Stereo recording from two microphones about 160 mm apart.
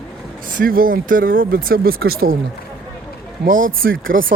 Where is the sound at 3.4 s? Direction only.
60° right (ahead or behind).